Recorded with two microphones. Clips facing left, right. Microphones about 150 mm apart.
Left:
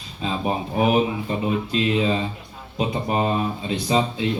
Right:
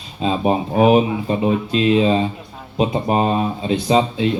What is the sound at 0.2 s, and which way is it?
Speech, 25° right (ahead or behind).